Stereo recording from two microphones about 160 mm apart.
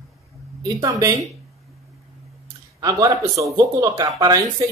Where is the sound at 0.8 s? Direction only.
20° right (ahead or behind).